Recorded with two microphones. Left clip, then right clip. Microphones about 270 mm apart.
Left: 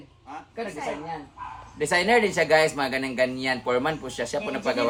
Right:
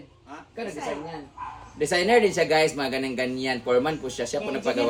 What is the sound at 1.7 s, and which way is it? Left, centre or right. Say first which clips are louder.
Speech: even; left.